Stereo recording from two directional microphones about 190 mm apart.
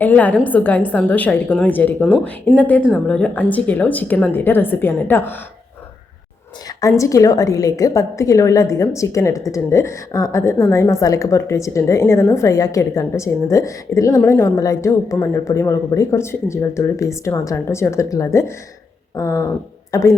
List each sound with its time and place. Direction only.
0.0 s a woman's voice: 10° left (ahead or behind)
2.1 s speech: centre (ahead or behind)
2.6 s a woman's voice: 10° left (ahead or behind)
6.8 s a woman's voice: 15° left (ahead or behind)